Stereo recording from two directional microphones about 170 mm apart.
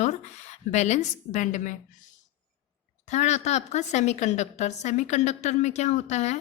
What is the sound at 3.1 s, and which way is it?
A woman's voice, 45° left (ahead or behind).